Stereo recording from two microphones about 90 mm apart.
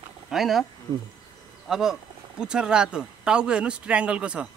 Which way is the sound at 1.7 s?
5° right (ahead or behind).